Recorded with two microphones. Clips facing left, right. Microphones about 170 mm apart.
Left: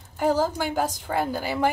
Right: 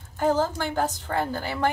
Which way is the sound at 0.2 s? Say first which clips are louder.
Left 1 dB; 10° left (ahead or behind).